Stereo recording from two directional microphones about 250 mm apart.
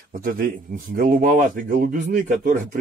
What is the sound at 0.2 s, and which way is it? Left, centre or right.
Speech, right.